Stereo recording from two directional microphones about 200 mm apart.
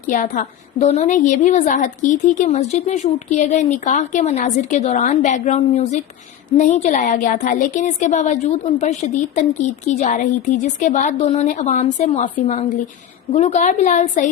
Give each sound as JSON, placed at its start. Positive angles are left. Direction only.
{"t": 0.1, "sound": "a woman's voice", "side_deg": 40}